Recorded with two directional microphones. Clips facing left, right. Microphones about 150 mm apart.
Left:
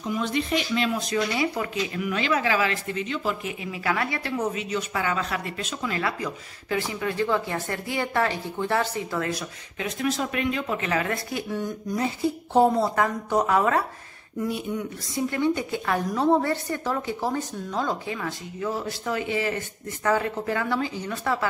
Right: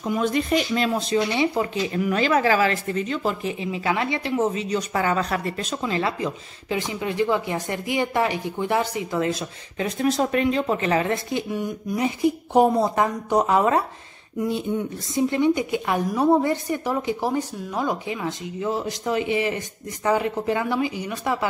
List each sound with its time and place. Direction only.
0.1 s speech: 45° right (ahead or behind)
1.1 s speech: 25° right (ahead or behind)
2.0 s speech: 40° right (ahead or behind)
3.6 s speech: 25° right (ahead or behind)
4.5 s speech: 35° right (ahead or behind)
9.8 s a woman's voice: 35° right (ahead or behind); by 21.5 s 15° right (ahead or behind)